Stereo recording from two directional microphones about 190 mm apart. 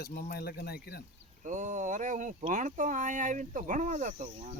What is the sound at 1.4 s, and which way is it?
Speech, 40° right (ahead or behind).